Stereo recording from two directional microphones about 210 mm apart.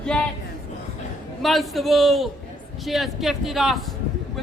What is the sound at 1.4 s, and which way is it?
A man's voice, centre (ahead or behind).